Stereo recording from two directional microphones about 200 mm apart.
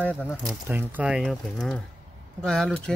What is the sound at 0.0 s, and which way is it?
Speech, 10° left (ahead or behind).